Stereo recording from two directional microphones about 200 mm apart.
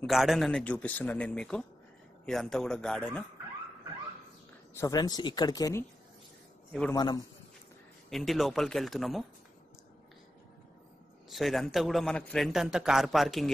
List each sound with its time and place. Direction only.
0.0 s a man's voice: centre (ahead or behind)
4.7 s speech: 20° left (ahead or behind)
6.9 s speech: 20° left (ahead or behind)
8.1 s a man's voice: centre (ahead or behind)
11.2 s a man's voice: centre (ahead or behind)